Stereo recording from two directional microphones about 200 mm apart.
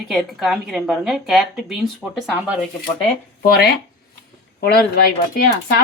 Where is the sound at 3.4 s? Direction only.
55° left (ahead or behind).